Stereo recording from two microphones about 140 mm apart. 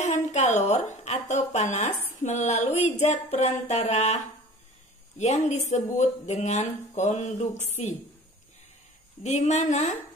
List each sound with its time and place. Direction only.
0.0 s a woman's voice: 55° left (ahead or behind)
5.2 s speech: 55° left (ahead or behind)
9.2 s speech: 55° left (ahead or behind)